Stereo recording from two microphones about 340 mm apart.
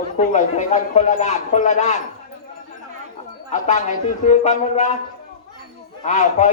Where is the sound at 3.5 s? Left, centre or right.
Centre.